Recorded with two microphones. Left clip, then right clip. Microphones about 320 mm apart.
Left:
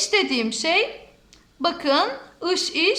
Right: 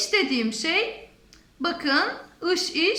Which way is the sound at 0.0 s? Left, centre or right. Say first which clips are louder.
Left 2 dB; centre.